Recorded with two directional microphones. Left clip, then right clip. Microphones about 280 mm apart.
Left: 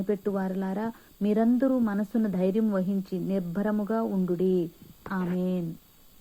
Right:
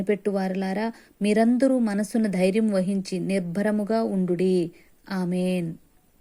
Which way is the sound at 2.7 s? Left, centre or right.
Right.